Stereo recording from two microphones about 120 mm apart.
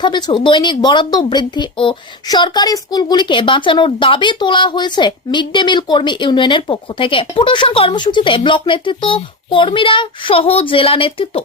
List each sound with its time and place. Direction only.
0.0 s speech: 40° left (ahead or behind)